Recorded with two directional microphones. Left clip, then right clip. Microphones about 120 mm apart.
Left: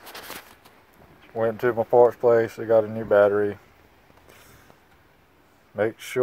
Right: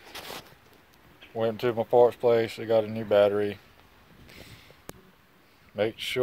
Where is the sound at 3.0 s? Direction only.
Centre (ahead or behind).